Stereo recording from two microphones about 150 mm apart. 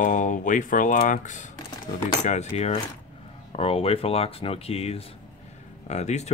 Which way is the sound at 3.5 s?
40° left (ahead or behind).